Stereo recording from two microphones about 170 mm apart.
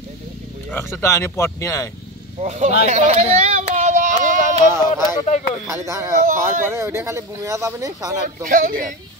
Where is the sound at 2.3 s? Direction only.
40° right (ahead or behind).